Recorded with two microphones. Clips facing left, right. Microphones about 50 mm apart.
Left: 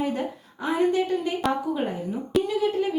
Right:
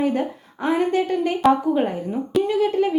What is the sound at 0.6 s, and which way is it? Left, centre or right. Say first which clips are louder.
Speech: right 3 dB; right.